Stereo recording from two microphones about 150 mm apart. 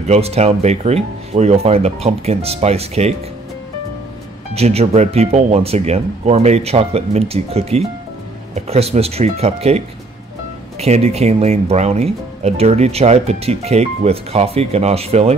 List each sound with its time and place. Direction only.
0.1 s speech: 45° right (ahead or behind)
4.6 s speech: 45° right (ahead or behind)